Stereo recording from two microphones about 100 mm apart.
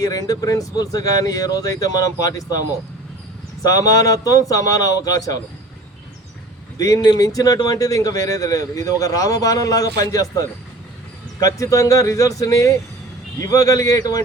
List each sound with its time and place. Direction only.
0.0 s speech: 35° left (ahead or behind)
3.6 s speech: 35° left (ahead or behind)
6.7 s speech: 35° left (ahead or behind)